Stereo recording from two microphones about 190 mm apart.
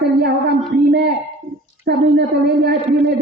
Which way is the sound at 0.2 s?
60° right (ahead or behind).